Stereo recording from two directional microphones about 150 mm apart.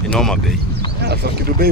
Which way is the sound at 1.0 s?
90° right.